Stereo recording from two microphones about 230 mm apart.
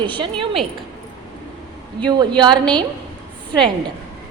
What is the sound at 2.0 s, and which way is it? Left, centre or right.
Speech, centre.